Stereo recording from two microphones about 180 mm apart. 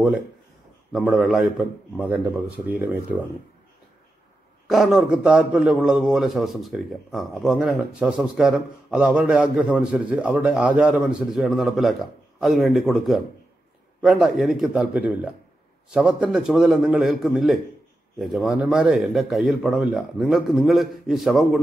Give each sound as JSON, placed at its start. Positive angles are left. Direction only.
{"t": 0.9, "sound": "a man's voice", "side_deg": 0}
{"t": 4.6, "sound": "a man's voice", "side_deg": 0}